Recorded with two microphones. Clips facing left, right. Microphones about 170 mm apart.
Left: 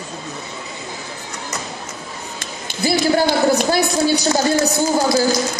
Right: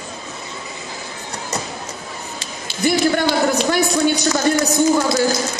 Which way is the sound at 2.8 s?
35° left (ahead or behind).